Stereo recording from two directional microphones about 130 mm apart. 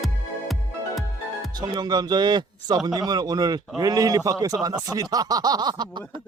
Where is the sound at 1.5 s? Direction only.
35° right (ahead or behind).